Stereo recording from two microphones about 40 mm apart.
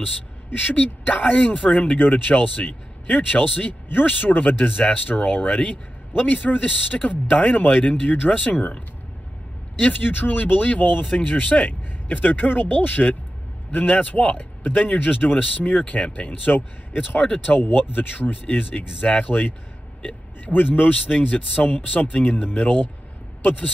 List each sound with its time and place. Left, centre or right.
0.7 s speech: left
6.1 s speech: left
7.9 s speech: left
9.8 s speech: left
14.3 s speech: left
15.8 s speech: left
17.2 s speech: left
17.6 s speech: left
20.0 s a sound: left
20.5 s speech: left
20.9 s speech: left